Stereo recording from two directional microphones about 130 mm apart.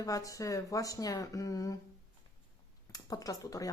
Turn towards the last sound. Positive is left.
turn(degrees=25)  # may be behind; listen again after turning